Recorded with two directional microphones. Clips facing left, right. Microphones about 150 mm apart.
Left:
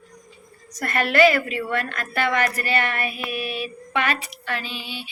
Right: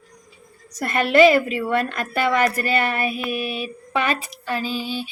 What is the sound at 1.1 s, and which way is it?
Speech, 25° right (ahead or behind).